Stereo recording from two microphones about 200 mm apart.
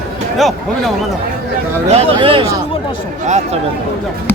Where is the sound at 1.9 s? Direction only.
30° right (ahead or behind).